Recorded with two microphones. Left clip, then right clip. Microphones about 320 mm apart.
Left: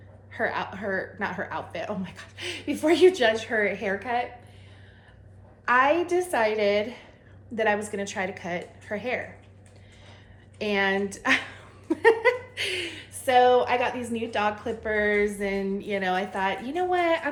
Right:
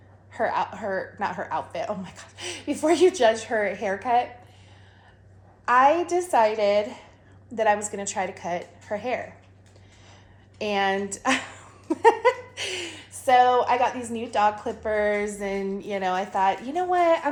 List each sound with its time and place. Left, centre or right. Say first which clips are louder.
0.3 s a woman's voice: right 3 dB; centre
5.6 s a woman's voice: right 2 dB; centre
10.6 s a sound: right 1 dB; centre
14.2 s a woman's voice: right 5 dB; centre